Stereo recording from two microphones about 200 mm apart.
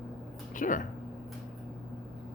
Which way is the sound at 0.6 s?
40° left (ahead or behind).